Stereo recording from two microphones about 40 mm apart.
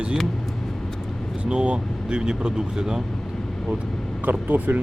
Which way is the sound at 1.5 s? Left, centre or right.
Right.